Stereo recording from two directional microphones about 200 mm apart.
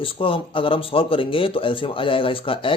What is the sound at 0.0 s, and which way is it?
Speech, 25° left (ahead or behind).